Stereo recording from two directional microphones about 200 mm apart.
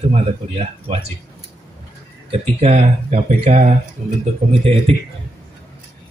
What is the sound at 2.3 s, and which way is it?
Speech, 30° right (ahead or behind).